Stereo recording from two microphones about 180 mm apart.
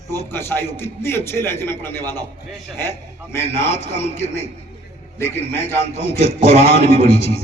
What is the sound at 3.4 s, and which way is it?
Speech, 35° left (ahead or behind).